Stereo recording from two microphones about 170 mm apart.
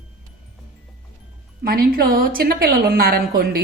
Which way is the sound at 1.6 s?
60° right (ahead or behind).